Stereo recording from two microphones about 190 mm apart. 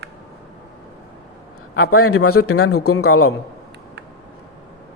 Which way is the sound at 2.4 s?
85° left.